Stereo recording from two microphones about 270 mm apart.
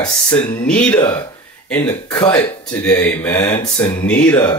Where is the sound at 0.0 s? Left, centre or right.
Centre.